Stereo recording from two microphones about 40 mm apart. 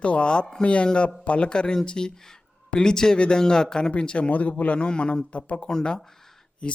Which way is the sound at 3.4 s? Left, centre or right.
Centre.